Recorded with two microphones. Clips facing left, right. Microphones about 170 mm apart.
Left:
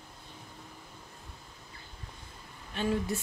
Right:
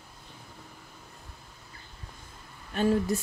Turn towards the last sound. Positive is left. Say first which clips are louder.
# right 5 dB
turn(degrees=-40)  # may be behind; listen again after turning